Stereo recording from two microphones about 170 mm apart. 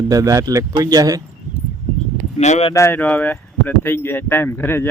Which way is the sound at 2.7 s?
15° left (ahead or behind).